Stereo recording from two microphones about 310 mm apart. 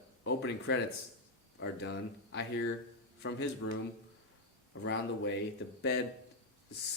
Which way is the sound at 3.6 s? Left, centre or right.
Left.